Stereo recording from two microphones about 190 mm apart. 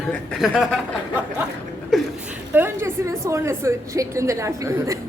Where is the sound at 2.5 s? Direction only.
10° right (ahead or behind).